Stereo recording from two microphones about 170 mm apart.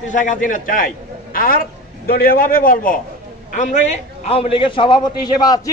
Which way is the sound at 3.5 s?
40° left (ahead or behind).